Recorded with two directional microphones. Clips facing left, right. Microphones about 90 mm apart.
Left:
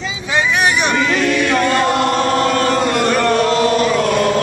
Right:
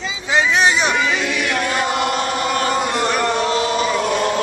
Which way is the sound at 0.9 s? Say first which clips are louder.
Left 4 dB; 10° right (ahead or behind).